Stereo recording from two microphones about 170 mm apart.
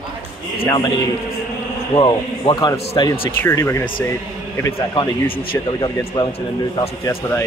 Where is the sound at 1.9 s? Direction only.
30° left (ahead or behind).